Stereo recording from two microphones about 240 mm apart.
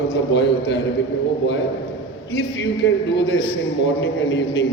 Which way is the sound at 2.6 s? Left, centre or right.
Left.